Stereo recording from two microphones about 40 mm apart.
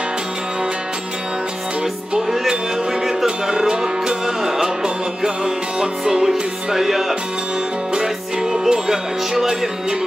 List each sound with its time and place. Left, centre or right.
3.4 s music: centre
8.6 s music: centre